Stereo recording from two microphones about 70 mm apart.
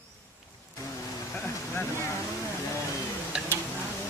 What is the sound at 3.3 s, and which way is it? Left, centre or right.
Tick-tock, centre.